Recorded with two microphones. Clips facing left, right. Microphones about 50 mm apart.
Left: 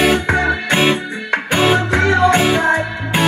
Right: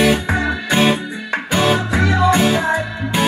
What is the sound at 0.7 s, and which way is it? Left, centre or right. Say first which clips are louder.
Music: left 1 dB; left.